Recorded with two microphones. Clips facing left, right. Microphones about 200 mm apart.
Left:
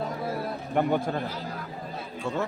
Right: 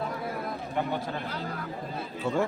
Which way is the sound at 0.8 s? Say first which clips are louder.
Left 6 dB; 50° left (ahead or behind).